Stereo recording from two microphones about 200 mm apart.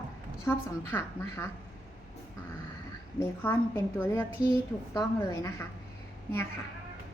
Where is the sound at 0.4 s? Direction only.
10° left (ahead or behind).